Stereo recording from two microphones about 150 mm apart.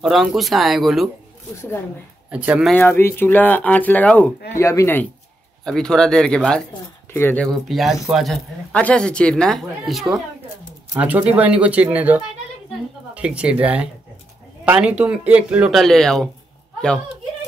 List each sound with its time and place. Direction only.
0.0 s speech: centre (ahead or behind)
2.3 s speech: 10° right (ahead or behind)
2.8 s speech: 15° left (ahead or behind)
5.7 s speech: 5° left (ahead or behind)
7.5 s speech: centre (ahead or behind)